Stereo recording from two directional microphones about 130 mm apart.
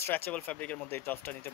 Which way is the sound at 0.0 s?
15° left (ahead or behind).